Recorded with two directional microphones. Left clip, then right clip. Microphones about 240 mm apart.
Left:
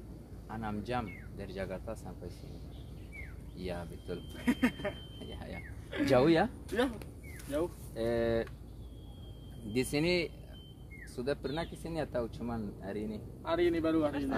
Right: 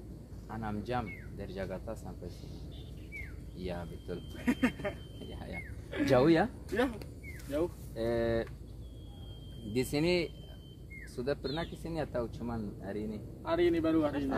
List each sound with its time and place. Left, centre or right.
0.5 s speech: centre
3.5 s speech: centre
4.4 s speech: centre
5.3 s speech: centre
7.9 s speech: centre
9.7 s speech: centre
13.4 s a man's voice: centre